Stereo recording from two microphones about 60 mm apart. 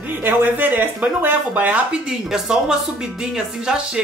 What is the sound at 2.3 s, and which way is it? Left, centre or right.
Speech, centre.